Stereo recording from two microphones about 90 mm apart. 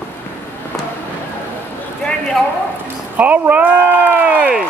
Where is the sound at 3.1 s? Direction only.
20° right (ahead or behind).